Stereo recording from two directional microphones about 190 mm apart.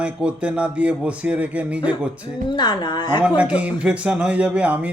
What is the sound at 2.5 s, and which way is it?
Speech, 25° left (ahead or behind).